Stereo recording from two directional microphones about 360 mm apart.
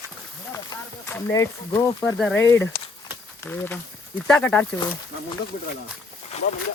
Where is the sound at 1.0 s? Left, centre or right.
Centre.